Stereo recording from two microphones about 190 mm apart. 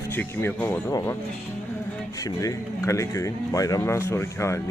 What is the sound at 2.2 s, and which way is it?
Speech, 15° left (ahead or behind).